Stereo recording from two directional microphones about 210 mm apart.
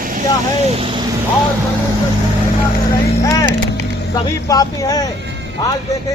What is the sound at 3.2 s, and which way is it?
Vehicle, 20° left (ahead or behind).